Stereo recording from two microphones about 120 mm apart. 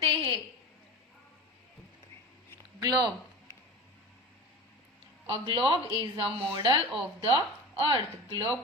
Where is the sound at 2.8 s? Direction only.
35° right (ahead or behind).